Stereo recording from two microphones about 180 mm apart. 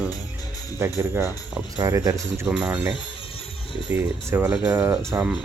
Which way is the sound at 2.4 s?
5° right (ahead or behind).